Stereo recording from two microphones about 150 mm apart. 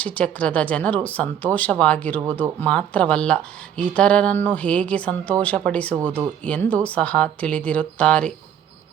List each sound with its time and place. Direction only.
0.0 s speech: 10° left (ahead or behind)